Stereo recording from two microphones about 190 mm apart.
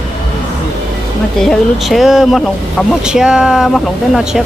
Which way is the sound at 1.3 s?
Centre (ahead or behind).